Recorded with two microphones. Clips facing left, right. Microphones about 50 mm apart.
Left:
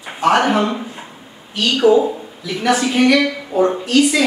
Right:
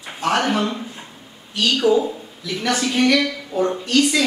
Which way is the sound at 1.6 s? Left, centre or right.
Centre.